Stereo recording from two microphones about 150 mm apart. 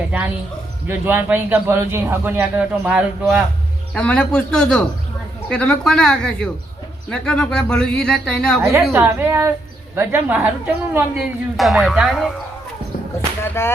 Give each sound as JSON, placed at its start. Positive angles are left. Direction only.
{"t": 0.9, "sound": "a man's voice", "side_deg": -15}
{"t": 3.9, "sound": "speech", "side_deg": 10}
{"t": 8.9, "sound": "a man's voice", "side_deg": -15}
{"t": 11.2, "sound": "speech", "side_deg": 0}
{"t": 13.4, "sound": "speech", "side_deg": 15}